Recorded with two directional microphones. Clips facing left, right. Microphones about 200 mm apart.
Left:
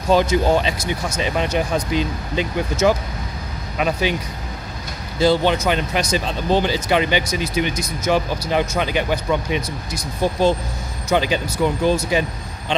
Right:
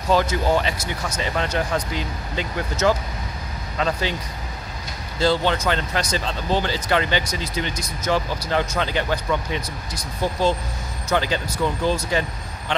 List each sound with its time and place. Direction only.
0.1 s speech: 20° left (ahead or behind)
5.2 s speech: 15° left (ahead or behind)